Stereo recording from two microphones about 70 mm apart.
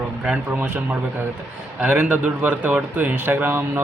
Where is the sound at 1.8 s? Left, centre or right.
Centre.